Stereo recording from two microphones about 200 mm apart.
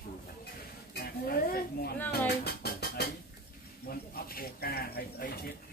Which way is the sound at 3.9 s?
50° left (ahead or behind).